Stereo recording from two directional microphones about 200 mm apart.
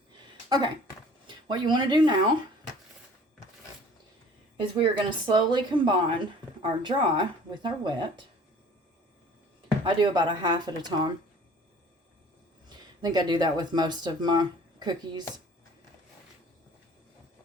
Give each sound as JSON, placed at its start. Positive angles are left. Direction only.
{"t": 0.4, "sound": "speech", "side_deg": -20}
{"t": 4.8, "sound": "speech", "side_deg": -25}
{"t": 9.8, "sound": "speech", "side_deg": -25}
{"t": 12.6, "sound": "speech", "side_deg": -20}